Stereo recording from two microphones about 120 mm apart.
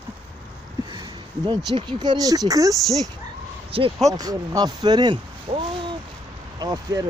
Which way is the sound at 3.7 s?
50° right (ahead or behind).